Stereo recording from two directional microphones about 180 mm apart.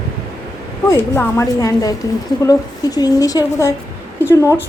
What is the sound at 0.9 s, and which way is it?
A woman's voice, 15° left (ahead or behind).